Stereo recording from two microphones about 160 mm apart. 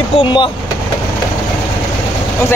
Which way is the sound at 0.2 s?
30° left (ahead or behind).